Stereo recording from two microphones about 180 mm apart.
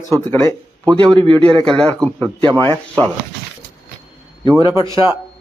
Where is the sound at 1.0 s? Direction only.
25° right (ahead or behind).